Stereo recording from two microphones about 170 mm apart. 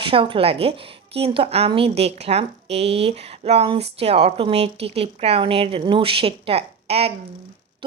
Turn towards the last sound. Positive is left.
turn(degrees=-35)  # may be behind; listen again after turning